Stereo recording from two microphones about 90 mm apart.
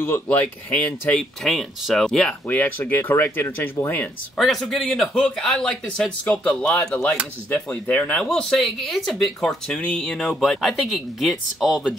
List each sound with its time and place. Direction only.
0.0 s speech: 25° left (ahead or behind)
0.7 s speech: 15° left (ahead or behind)
1.4 s speech: centre (ahead or behind)
2.4 s speech: 20° left (ahead or behind)
4.4 s speech: centre (ahead or behind)